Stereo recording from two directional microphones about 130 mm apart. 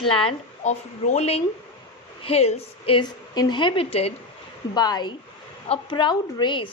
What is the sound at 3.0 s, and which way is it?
Speech, 30° left (ahead or behind).